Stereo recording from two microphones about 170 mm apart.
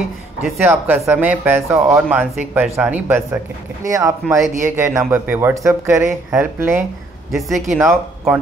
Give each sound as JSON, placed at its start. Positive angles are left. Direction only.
{"t": 0.4, "sound": "speech", "side_deg": -10}